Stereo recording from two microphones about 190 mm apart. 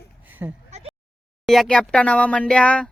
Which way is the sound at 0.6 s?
35° right (ahead or behind).